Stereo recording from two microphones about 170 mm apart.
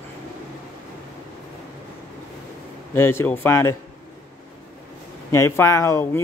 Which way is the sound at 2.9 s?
15° left (ahead or behind).